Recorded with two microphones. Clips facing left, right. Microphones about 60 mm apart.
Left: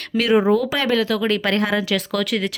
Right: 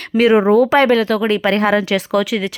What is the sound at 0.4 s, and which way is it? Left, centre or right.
Speech, right.